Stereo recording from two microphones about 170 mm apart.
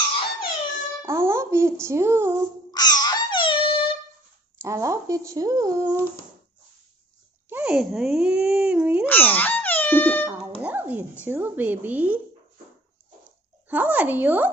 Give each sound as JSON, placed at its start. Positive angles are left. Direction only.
{"t": 0.7, "sound": "a sound", "side_deg": -15}
{"t": 2.7, "sound": "babbling", "side_deg": 25}
{"t": 4.6, "sound": "speech", "side_deg": -15}
{"t": 7.4, "sound": "speech", "side_deg": -10}
{"t": 9.0, "sound": "speech", "side_deg": 10}
{"t": 10.6, "sound": "dog", "side_deg": -10}
{"t": 11.2, "sound": "speech", "side_deg": -10}
{"t": 13.7, "sound": "speech", "side_deg": -10}